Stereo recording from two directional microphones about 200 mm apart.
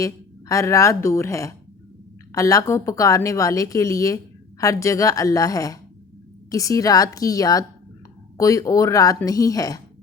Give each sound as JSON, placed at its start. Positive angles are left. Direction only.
{"t": 0.0, "sound": "a woman's voice", "side_deg": 15}